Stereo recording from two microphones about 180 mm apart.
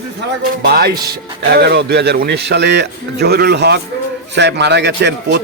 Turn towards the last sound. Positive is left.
turn(degrees=-75)  # may be behind; listen again after turning